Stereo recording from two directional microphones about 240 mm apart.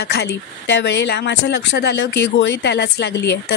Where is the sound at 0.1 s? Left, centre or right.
Left.